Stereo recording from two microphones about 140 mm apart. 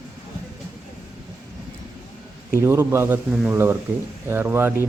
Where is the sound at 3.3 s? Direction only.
5° right (ahead or behind).